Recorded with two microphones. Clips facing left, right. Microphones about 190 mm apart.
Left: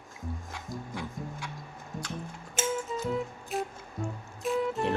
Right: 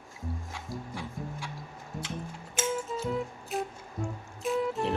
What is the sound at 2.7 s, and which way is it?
Music, centre (ahead or behind).